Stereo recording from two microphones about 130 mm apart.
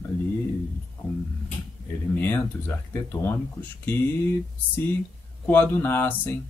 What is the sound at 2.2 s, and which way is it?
Speech, 15° left (ahead or behind).